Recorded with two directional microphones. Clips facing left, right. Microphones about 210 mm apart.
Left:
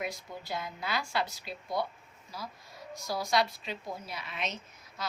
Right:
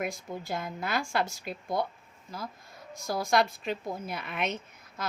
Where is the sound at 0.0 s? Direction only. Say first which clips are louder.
Right 4 dB; 50° right (ahead or behind).